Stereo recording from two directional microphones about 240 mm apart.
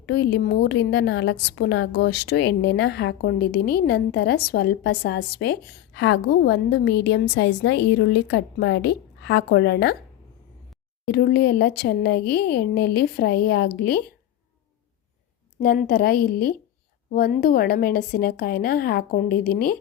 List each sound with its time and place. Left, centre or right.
0.0 s a woman's voice: left
11.1 s a woman's voice: left
15.6 s a woman's voice: left